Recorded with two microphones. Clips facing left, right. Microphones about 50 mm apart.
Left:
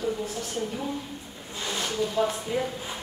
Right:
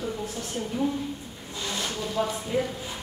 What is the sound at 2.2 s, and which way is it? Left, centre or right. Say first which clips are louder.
Speech: left 2 dB; centre.